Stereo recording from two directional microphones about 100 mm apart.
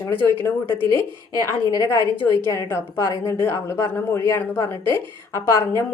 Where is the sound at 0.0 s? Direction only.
20° left (ahead or behind).